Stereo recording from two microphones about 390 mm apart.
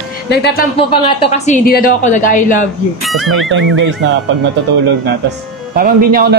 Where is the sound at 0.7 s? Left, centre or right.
Centre.